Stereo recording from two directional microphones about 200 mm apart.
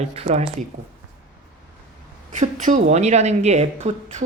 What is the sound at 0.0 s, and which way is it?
Speech, 30° right (ahead or behind).